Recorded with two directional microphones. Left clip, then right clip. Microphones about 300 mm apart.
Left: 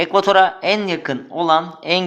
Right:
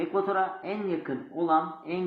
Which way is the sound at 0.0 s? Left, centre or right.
Left.